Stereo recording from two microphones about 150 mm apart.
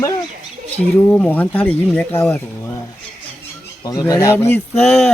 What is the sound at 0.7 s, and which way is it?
Speech, 10° left (ahead or behind).